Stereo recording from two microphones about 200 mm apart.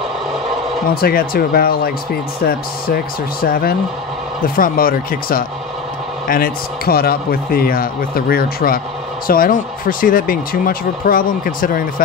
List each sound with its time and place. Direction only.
1.0 s a man's voice: 50° left (ahead or behind)